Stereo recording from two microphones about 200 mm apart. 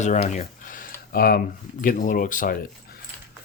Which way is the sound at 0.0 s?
35° left (ahead or behind).